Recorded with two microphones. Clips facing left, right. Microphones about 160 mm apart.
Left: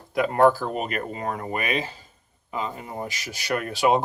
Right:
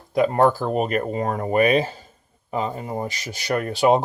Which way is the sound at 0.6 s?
40° right (ahead or behind).